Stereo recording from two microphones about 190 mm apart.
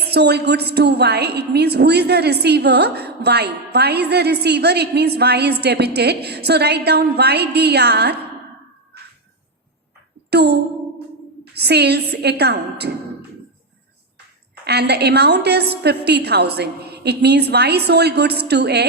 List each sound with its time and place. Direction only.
0.1 s a woman's voice: 60° right (ahead or behind)
10.2 s a woman's voice: 60° right (ahead or behind)
14.6 s a woman's voice: 60° right (ahead or behind)